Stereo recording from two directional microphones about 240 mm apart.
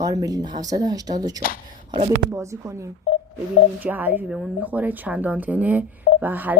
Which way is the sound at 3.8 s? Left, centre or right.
Centre.